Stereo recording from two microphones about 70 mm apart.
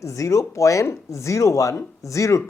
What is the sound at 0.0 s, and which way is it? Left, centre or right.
Speech, left.